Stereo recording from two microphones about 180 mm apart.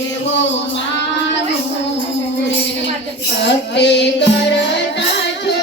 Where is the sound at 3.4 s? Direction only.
75° left (ahead or behind).